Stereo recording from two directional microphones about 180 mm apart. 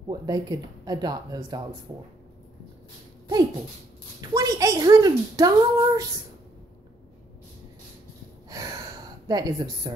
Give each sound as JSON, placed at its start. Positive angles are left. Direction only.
{"t": 0.1, "sound": "a woman's voice", "side_deg": -20}
{"t": 4.2, "sound": "a woman's voice", "side_deg": -20}
{"t": 9.3, "sound": "a woman's voice", "side_deg": -20}